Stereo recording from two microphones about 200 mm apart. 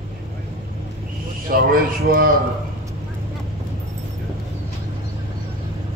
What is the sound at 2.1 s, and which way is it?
Mantra, 45° right (ahead or behind).